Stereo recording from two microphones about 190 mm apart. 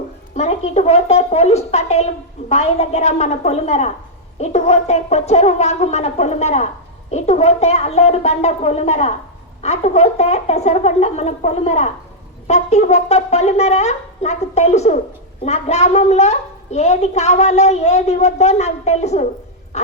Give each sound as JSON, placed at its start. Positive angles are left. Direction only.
{"t": 0.3, "sound": "a woman's voice", "side_deg": 35}
{"t": 19.7, "sound": "music", "side_deg": 35}